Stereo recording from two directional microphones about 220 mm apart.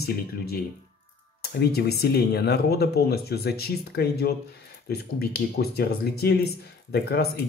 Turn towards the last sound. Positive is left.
turn(degrees=45)  # may be behind; listen again after turning